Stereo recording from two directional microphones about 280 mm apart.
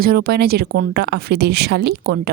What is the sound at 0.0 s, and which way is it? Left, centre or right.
Speech, right.